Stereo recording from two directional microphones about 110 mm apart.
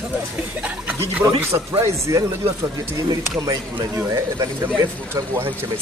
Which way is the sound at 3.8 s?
30° right (ahead or behind).